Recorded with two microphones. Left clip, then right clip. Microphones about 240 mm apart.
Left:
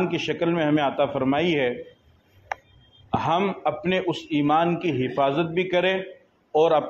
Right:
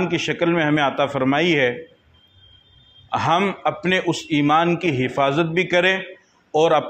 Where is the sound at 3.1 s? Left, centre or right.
Right.